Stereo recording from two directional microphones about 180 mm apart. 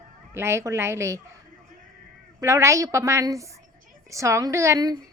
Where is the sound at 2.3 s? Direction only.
15° right (ahead or behind).